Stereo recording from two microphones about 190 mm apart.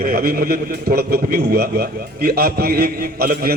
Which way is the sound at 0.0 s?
50° right (ahead or behind).